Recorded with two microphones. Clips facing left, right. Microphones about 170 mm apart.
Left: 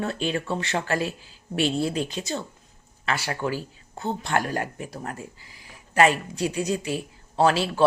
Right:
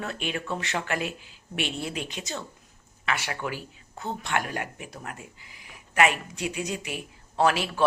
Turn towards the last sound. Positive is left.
turn(degrees=30)  # may be behind; listen again after turning